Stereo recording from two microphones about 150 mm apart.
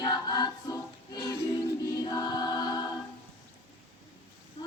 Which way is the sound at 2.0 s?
25° left (ahead or behind).